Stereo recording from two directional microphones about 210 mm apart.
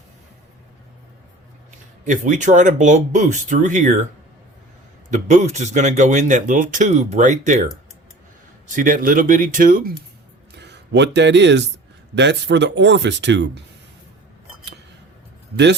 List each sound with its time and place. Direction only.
2.0 s speech: 35° right (ahead or behind)
5.1 s speech: 35° right (ahead or behind)
10.6 s speech: 55° right (ahead or behind)